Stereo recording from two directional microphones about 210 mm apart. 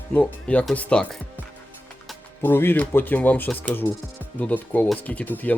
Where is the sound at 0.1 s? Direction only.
5° left (ahead or behind).